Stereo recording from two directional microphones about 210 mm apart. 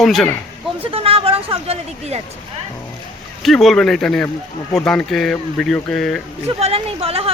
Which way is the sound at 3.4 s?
Centre (ahead or behind).